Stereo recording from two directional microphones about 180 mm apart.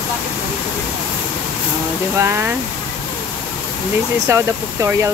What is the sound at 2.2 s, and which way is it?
Speech, 15° right (ahead or behind).